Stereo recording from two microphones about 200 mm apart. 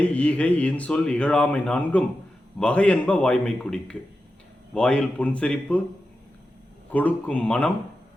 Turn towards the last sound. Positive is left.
turn(degrees=5)  # may be behind; listen again after turning